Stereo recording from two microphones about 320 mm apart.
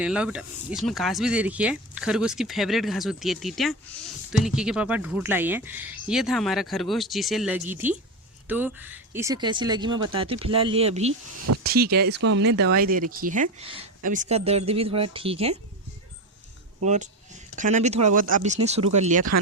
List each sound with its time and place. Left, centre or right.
0.0 s speech: centre
11.6 s speech: right
16.8 s speech: right